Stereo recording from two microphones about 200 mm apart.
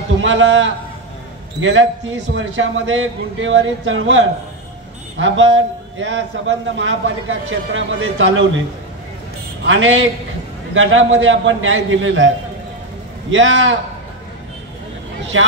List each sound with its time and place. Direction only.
0.2 s a man's voice: 65° right (ahead or behind)
9.7 s a man's voice: 80° right
13.3 s a man's voice: 75° right (ahead or behind)
15.3 s a man's voice: 75° right (ahead or behind)